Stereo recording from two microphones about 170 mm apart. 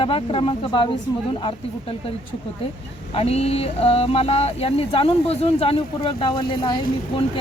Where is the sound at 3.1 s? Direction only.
35° left (ahead or behind).